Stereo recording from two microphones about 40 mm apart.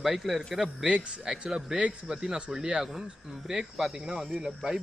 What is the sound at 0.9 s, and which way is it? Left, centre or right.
Speech, right.